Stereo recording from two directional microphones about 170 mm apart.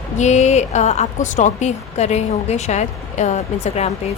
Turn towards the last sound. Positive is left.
turn(degrees=40)  # may be behind; listen again after turning